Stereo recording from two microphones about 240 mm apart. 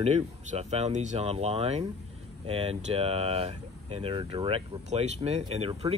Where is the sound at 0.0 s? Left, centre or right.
Right.